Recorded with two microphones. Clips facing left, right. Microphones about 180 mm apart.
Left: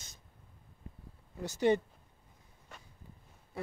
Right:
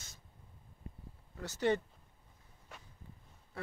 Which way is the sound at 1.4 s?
15° left (ahead or behind).